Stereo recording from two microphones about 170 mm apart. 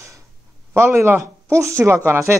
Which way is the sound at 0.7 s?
15° right (ahead or behind).